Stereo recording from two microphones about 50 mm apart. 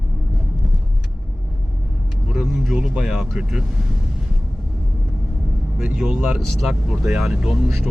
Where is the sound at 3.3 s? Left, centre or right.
Centre.